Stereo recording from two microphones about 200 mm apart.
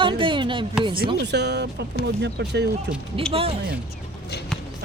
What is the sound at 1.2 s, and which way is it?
A man's voice, 55° right (ahead or behind).